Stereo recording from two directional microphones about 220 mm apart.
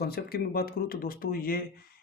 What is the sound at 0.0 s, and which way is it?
Speech, 45° left (ahead or behind).